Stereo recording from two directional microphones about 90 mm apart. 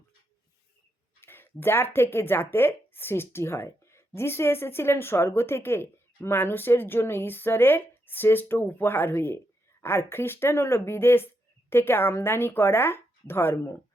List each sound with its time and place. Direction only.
1.2 s speech: 25° left (ahead or behind)